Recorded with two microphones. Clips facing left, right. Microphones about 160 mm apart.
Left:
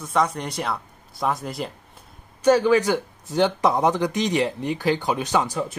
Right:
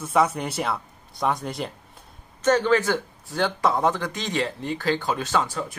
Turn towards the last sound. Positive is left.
turn(degrees=15)  # may be behind; listen again after turning